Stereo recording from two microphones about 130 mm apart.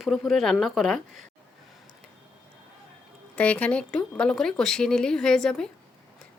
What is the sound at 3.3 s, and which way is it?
A woman's voice, 10° left (ahead or behind).